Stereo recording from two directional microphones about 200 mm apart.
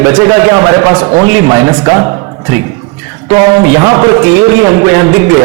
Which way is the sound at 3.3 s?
20° right (ahead or behind).